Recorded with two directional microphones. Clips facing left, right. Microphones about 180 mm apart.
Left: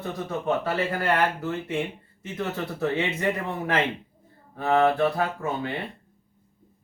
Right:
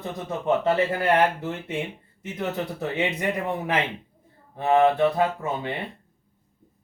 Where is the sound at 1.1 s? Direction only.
20° right (ahead or behind).